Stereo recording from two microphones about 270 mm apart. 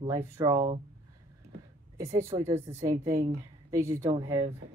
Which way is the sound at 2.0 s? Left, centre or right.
Centre.